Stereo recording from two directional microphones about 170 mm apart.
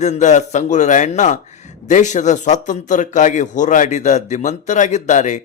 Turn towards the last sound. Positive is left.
turn(degrees=45)  # may be behind; listen again after turning